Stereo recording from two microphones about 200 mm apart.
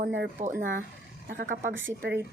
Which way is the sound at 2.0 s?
60° right (ahead or behind).